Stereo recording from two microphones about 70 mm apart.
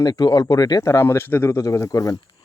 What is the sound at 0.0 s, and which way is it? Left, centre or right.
Speech, left.